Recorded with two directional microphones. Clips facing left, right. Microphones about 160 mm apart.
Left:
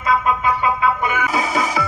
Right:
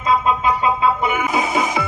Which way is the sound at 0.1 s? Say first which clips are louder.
Right 1 dB; 20° right (ahead or behind).